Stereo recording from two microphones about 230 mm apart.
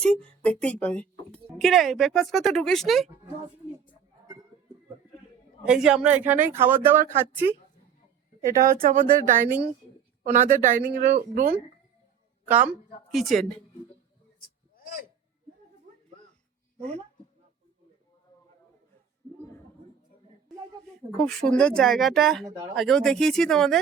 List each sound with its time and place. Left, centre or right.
0.0 s speech: centre
5.6 s speech: centre
8.5 s speech: right
12.5 s speech: centre
14.8 s a sound: left
21.2 s speech: centre